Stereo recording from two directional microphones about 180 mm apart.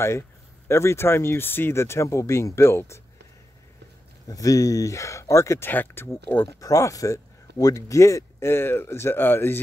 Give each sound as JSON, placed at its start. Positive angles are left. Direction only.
{"t": 0.7, "sound": "speech", "side_deg": 15}
{"t": 4.3, "sound": "speech", "side_deg": 20}